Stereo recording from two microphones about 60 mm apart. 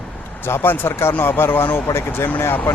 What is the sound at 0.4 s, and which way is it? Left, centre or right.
Speech, left.